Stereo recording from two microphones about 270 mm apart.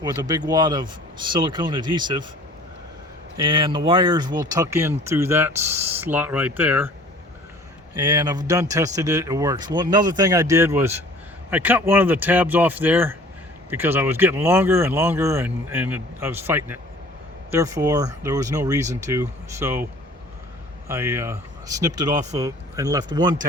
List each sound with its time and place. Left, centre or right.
0.0 s speech: centre
3.3 s speech: centre
7.9 s speech: centre